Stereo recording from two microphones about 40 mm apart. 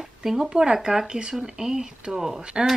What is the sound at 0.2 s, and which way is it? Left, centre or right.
Speech, centre.